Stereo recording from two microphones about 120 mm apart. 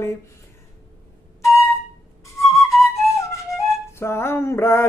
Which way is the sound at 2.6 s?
Centre (ahead or behind).